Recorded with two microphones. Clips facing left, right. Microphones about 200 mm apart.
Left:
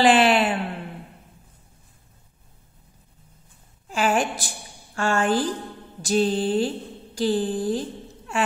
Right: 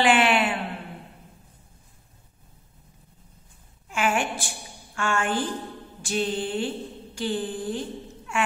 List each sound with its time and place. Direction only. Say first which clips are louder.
0.0 s mantra: left 3 dB; 35° left (ahead or behind)
3.9 s a woman's voice: left 3 dB; 35° left (ahead or behind)
6.0 s mantra: left 6 dB; 35° left (ahead or behind)
8.3 s a sound: left 2 dB; 35° left (ahead or behind)